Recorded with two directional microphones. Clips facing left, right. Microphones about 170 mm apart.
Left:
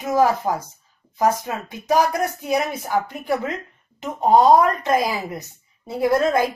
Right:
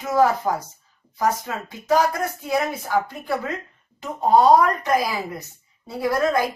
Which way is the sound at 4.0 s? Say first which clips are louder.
Left 1 dB; 20° left (ahead or behind).